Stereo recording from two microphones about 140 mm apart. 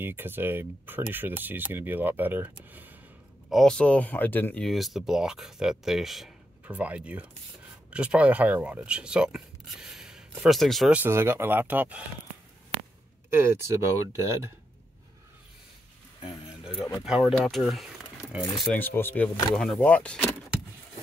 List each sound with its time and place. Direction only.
0.0 s speech: 15° right (ahead or behind)
2.7 s a sound: 10° right (ahead or behind)
3.4 s speech: centre (ahead or behind)
4.6 s speech: centre (ahead or behind)
11.0 s speech: 15° right (ahead or behind)
13.7 s speech: 20° right (ahead or behind)
16.9 s speech: 5° right (ahead or behind)
18.6 s speech: 10° left (ahead or behind)